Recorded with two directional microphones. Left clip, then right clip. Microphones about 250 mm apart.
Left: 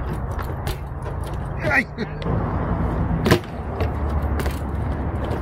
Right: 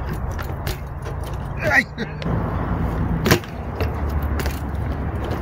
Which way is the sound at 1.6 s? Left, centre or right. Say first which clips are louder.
Right 2 dB; centre.